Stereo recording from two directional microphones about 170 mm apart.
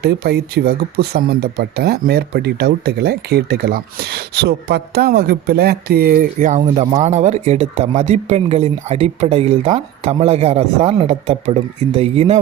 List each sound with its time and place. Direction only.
0.0 s speech: 65° right (ahead or behind); by 12.4 s 35° right (ahead or behind)